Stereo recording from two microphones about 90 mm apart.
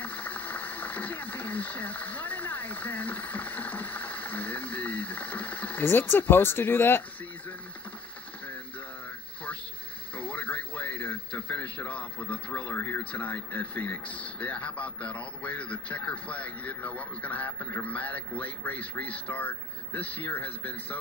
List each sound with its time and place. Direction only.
0.0 s speech: 20° left (ahead or behind)
10.1 s a man's voice: 15° left (ahead or behind)